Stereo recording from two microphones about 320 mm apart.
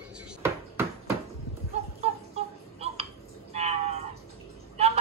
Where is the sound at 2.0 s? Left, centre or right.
Centre.